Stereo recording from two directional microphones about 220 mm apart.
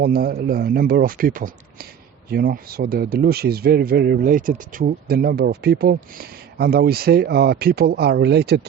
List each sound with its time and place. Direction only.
0.0 s speech: 45° right (ahead or behind)